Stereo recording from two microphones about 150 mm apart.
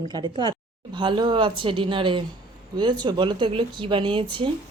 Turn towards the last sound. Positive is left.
turn(degrees=-35)  # may be behind; listen again after turning